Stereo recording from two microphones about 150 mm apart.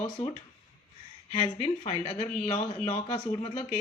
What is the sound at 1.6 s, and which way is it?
Speech, 40° left (ahead or behind).